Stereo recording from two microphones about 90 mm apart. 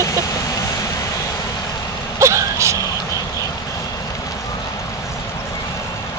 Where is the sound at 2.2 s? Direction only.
35° right (ahead or behind).